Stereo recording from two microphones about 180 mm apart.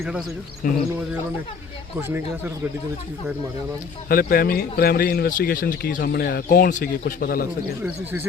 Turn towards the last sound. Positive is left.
turn(degrees=55)  # may be behind; listen again after turning